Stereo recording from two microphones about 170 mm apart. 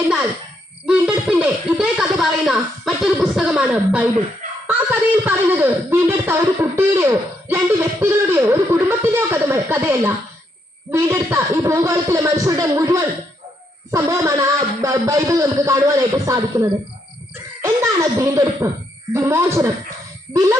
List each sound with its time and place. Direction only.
0.9 s speech: 5° right (ahead or behind)